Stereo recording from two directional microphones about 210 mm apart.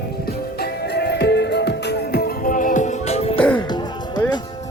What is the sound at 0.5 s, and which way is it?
Music, 50° left (ahead or behind).